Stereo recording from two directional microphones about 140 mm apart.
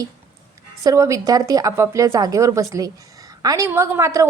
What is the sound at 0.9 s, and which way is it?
A woman's voice, 20° right (ahead or behind).